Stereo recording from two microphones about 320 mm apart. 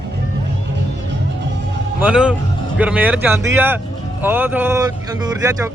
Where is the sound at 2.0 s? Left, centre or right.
Centre.